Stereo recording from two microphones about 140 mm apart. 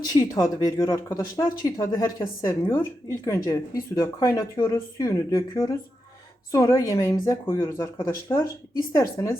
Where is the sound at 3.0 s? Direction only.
20° left (ahead or behind).